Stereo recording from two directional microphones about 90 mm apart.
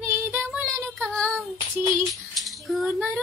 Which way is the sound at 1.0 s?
10° left (ahead or behind).